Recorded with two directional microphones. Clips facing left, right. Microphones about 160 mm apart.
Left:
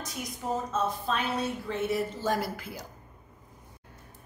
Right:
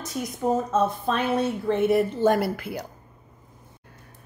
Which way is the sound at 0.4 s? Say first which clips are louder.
Right 8 dB; 55° right (ahead or behind).